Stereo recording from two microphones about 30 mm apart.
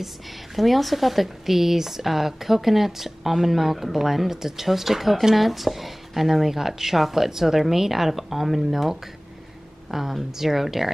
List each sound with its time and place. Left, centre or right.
0.6 s speech: centre